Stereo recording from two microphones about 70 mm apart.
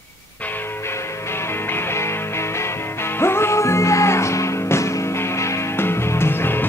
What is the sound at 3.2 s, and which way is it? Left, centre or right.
Music, left.